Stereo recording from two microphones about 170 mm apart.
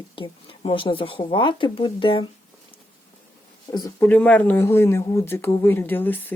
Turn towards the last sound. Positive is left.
turn(degrees=10)  # may be behind; listen again after turning